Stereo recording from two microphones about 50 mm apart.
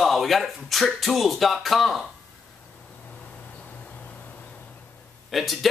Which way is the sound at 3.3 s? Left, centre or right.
Left.